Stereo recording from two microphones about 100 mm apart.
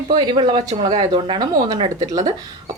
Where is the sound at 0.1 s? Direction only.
50° right (ahead or behind).